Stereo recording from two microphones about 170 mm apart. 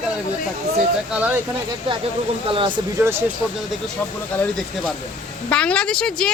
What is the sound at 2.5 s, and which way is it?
Speech, 30° right (ahead or behind).